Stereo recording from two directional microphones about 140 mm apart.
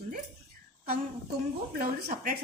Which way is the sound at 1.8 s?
90° right.